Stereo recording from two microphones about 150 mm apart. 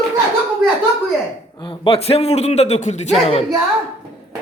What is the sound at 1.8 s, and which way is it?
A man's voice, 40° left (ahead or behind).